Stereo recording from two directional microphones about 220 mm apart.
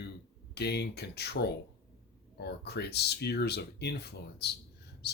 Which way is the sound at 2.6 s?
50° left (ahead or behind).